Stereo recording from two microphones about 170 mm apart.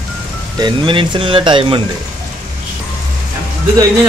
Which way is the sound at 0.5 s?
30° right (ahead or behind).